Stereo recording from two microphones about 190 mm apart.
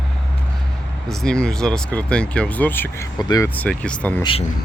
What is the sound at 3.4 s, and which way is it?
Speech, 10° left (ahead or behind).